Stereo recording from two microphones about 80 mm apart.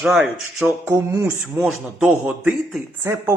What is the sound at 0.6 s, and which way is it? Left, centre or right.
Speech, right.